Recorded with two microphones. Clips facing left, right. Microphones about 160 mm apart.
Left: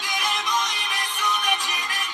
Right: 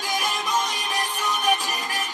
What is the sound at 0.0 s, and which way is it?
Music, 40° right (ahead or behind).